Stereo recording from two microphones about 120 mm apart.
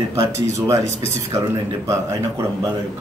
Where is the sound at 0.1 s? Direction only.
25° right (ahead or behind).